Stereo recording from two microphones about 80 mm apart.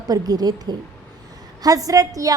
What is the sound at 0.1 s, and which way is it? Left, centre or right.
A woman's voice, right.